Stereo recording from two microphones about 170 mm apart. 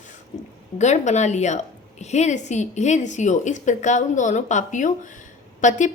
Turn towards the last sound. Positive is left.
turn(degrees=45)  # may be behind; listen again after turning